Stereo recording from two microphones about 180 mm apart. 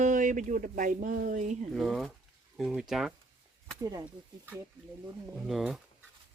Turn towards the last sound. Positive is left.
turn(degrees=0)  # may be behind; listen again after turning